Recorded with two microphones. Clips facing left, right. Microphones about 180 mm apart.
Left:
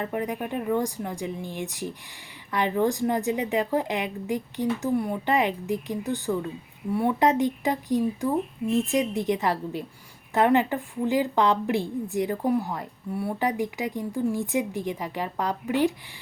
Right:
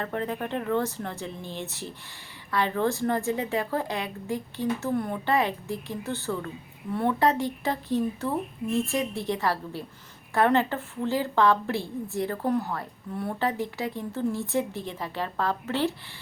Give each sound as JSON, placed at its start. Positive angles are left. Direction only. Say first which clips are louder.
{"t": 0.0, "sound": "a woman's voice", "louder": "left 1 dB", "side_deg": 15}